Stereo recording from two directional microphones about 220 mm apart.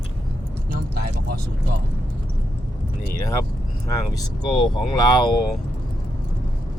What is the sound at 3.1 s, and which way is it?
Speech, 15° left (ahead or behind).